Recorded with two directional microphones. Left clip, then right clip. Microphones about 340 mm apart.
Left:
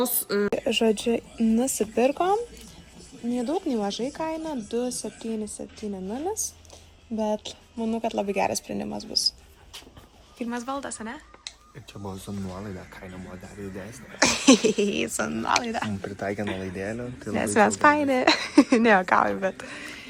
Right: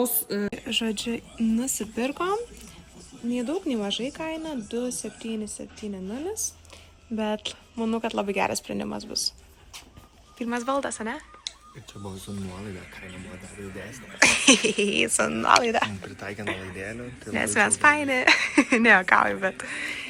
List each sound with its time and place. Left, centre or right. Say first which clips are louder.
0.3 s speech: left 5 dB; centre
10.4 s speech: right 4 dB; centre
12.3 s a woman's voice: left 1 dB; centre
13.9 s a woman's voice: right 3 dB; centre
16.0 s a woman's voice: left 6 dB; centre